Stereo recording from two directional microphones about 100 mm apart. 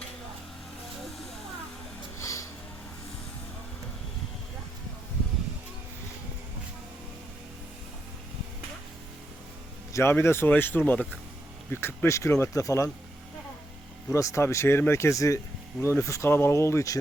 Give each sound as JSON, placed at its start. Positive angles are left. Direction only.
{"t": 2.2, "sound": "music", "side_deg": 30}
{"t": 9.9, "sound": "speech", "side_deg": 25}
{"t": 14.1, "sound": "speech", "side_deg": 30}